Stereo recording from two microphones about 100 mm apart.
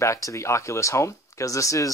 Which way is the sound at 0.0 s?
30° left (ahead or behind).